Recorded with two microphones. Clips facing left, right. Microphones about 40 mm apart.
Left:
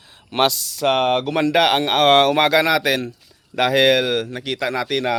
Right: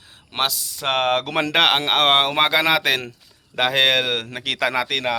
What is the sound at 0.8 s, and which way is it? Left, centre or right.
Speech, right.